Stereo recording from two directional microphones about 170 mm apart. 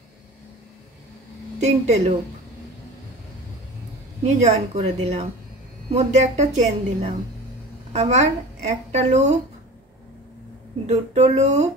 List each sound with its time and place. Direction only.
1.6 s a woman's voice: 40° right (ahead or behind)
4.4 s a woman's voice: 40° right (ahead or behind)
10.9 s a woman's voice: 40° right (ahead or behind)